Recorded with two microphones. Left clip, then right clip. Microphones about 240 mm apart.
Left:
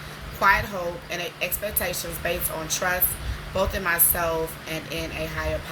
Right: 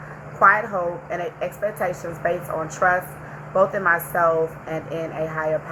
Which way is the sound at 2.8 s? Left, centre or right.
Left.